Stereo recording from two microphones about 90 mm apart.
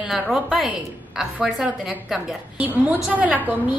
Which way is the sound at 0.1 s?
Centre (ahead or behind).